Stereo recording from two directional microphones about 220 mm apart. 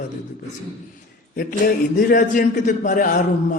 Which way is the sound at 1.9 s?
35° left (ahead or behind).